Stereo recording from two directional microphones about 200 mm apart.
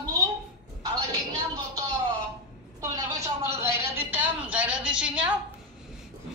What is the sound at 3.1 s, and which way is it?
Speech, 35° right (ahead or behind).